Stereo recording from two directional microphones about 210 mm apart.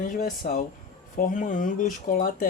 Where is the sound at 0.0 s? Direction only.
40° left (ahead or behind).